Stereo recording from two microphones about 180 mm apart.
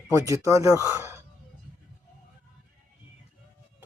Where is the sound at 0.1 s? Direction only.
15° right (ahead or behind).